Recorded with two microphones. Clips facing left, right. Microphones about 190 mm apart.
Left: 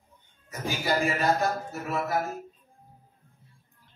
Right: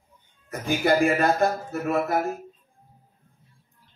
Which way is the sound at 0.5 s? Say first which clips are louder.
Right 7 dB; 55° right (ahead or behind).